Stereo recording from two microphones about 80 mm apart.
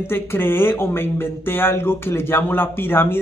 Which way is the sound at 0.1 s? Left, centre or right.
Left.